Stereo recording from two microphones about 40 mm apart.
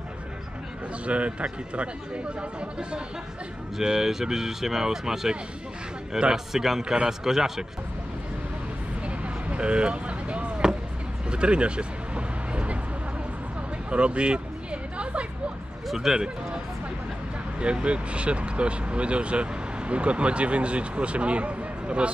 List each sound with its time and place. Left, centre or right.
1.0 s speech: right
3.7 s speech: centre
6.3 s speech: centre
6.8 s speech: right
7.1 s speech: centre
9.0 s a sound: right
11.2 s vehicle: right
13.8 s a sound: right
16.0 s speech: centre
17.6 s speech: right